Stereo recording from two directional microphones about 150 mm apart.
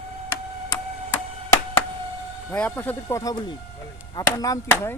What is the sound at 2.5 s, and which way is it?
Speech, 10° left (ahead or behind).